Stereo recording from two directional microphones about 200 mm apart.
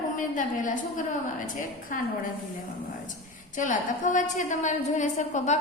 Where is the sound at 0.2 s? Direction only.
40° left (ahead or behind).